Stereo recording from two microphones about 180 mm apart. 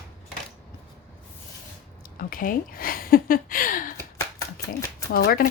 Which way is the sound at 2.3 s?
50° left (ahead or behind).